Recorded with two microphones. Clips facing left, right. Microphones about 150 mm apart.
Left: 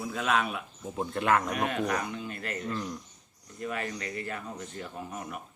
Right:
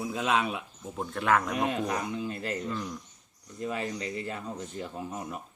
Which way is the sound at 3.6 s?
25° right (ahead or behind).